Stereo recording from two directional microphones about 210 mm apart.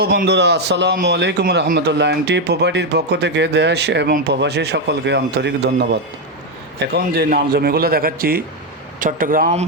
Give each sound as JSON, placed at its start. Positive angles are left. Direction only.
{"t": 0.0, "sound": "a man's voice", "side_deg": -50}